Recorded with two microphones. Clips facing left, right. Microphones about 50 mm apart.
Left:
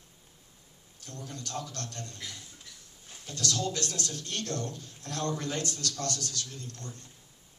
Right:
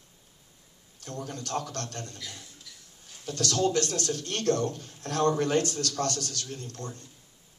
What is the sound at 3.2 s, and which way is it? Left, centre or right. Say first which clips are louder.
A man's voice: right 6 dB; right.